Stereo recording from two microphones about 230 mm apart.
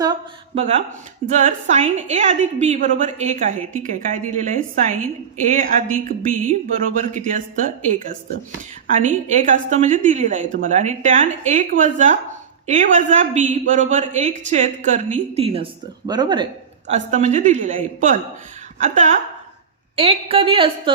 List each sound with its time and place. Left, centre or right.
0.0 s speech: centre
1.3 s a woman's voice: right
16.9 s a woman's voice: right
20.0 s a woman's voice: right